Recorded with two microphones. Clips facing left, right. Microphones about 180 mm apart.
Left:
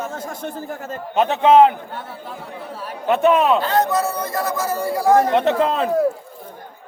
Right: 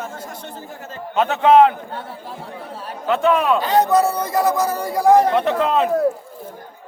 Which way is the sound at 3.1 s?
20° left (ahead or behind).